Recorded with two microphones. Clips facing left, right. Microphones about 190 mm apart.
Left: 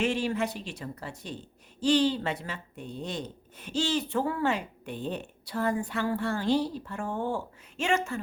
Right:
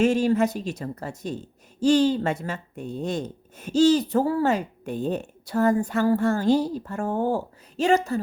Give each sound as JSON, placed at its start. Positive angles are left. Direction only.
{"t": 0.0, "sound": "speech", "side_deg": -40}